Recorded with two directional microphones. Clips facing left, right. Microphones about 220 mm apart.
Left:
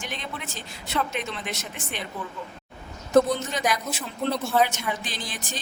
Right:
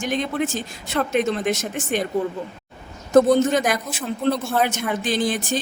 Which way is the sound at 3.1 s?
50° right (ahead or behind).